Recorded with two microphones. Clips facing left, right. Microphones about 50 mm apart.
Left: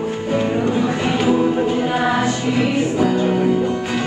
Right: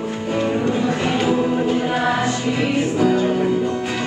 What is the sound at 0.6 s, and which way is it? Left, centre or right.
Choir, centre.